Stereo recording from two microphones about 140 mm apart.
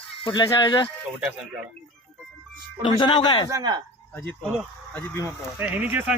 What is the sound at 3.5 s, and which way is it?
Speech, 25° right (ahead or behind).